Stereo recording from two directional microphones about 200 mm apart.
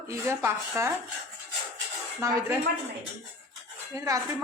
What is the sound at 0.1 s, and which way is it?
Speech, 15° right (ahead or behind).